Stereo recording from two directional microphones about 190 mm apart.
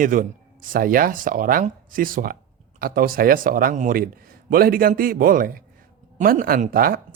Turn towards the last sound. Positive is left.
turn(degrees=-50)  # may be behind; listen again after turning